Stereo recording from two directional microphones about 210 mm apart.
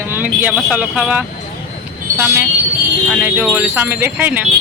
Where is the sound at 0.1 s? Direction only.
10° right (ahead or behind).